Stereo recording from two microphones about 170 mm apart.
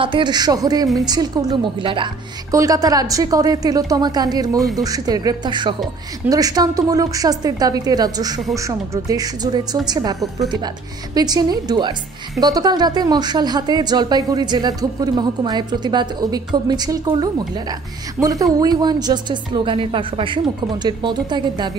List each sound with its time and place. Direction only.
0.0 s speech: 30° right (ahead or behind)